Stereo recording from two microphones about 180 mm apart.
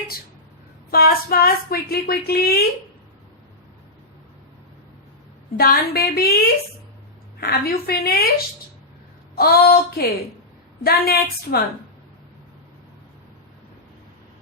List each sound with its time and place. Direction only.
0.9 s a woman's voice: 55° left (ahead or behind)
5.5 s a woman's voice: 60° left (ahead or behind)
9.3 s a woman's voice: 60° left (ahead or behind)